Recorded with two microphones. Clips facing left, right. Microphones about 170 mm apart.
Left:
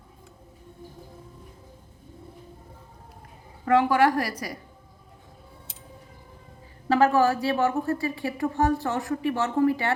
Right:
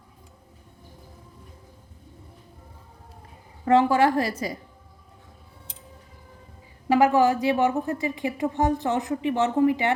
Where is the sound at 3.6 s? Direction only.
25° right (ahead or behind).